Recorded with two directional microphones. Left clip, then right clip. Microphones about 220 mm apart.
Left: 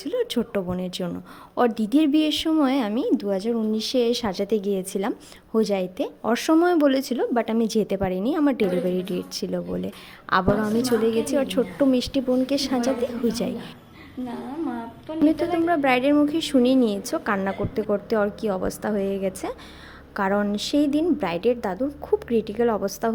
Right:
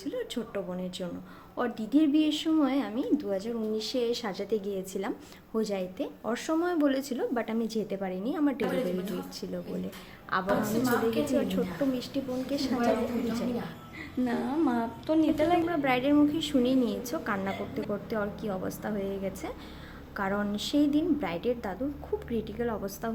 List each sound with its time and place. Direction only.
0.0 s a woman's voice: 45° left (ahead or behind)
14.3 s a woman's voice: 20° right (ahead or behind)
15.6 s a woman's voice: 35° left (ahead or behind)